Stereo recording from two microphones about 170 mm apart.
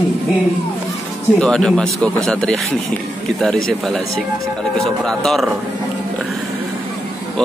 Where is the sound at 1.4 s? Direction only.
5° left (ahead or behind).